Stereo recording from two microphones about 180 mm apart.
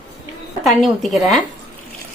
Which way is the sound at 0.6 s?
Centre (ahead or behind).